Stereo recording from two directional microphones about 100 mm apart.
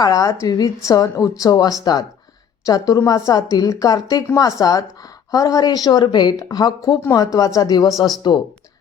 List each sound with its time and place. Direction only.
0.0 s speech: 35° left (ahead or behind)